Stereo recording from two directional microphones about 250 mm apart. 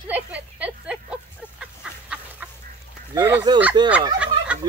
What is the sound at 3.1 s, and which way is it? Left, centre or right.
Speech, centre.